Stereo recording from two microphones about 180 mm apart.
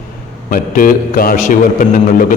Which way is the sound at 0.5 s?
50° left (ahead or behind).